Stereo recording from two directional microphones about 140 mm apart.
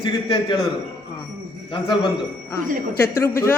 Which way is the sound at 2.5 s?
15° left (ahead or behind).